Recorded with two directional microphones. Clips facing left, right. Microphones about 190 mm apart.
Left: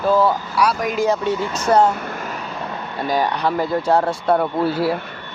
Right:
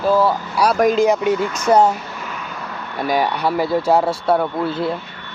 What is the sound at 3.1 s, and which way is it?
Speech, 10° right (ahead or behind).